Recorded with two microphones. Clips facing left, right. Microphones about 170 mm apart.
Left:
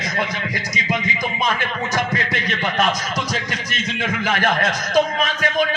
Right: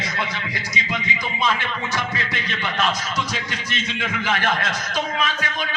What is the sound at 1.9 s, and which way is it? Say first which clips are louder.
A man's voice: left 4 dB; 45° left (ahead or behind).